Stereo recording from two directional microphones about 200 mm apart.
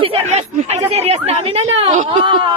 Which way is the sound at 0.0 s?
30° right (ahead or behind).